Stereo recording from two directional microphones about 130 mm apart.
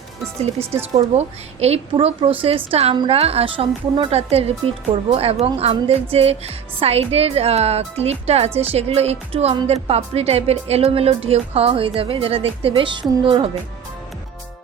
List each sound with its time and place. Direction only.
0.7 s a woman's voice: 55° right (ahead or behind)
2.9 s a woman's voice: 40° right (ahead or behind)
3.2 s a woman's voice: 50° right (ahead or behind)